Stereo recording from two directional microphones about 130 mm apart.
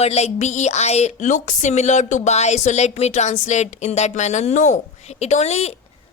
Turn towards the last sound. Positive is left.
turn(degrees=55)  # may be behind; listen again after turning